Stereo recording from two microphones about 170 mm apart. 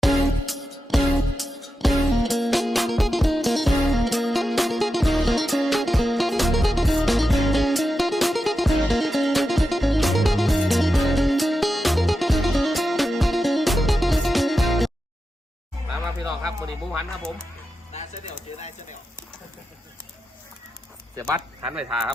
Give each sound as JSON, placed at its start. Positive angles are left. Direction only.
{"t": 0.0, "sound": "music", "side_deg": 0}
{"t": 21.2, "sound": "a sound", "side_deg": -20}
{"t": 21.6, "sound": "speech", "side_deg": -5}